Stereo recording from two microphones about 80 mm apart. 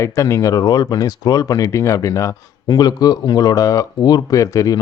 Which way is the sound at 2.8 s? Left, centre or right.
Left.